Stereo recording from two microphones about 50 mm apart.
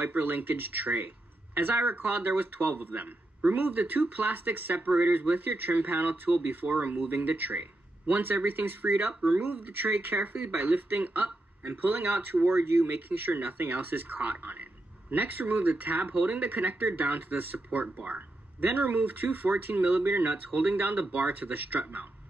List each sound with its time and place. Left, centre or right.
0.0 s speech: right